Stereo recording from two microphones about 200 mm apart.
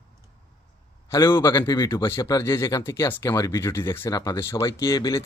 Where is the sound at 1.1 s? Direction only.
15° left (ahead or behind).